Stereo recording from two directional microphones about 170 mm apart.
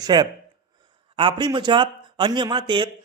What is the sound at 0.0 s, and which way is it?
A man's voice, 25° right (ahead or behind).